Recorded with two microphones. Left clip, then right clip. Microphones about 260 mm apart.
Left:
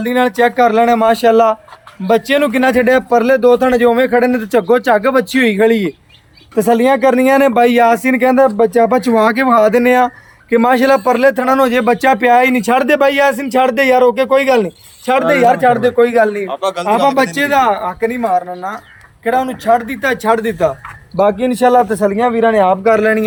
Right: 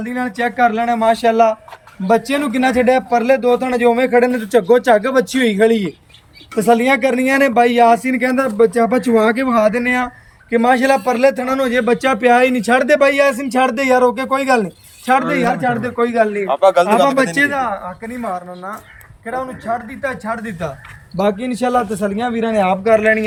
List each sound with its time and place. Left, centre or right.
0.0 s speech: left
16.5 s speech: centre
17.3 s speech: left
21.2 s speech: centre